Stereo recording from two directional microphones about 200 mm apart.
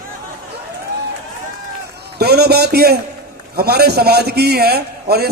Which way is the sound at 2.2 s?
50° right (ahead or behind).